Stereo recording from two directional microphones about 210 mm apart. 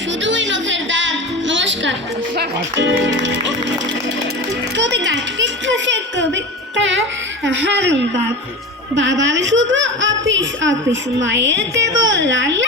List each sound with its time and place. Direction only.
0.2 s music: 60° right (ahead or behind)
4.8 s a sound: 60° right (ahead or behind)
7.4 s speech: 60° right (ahead or behind)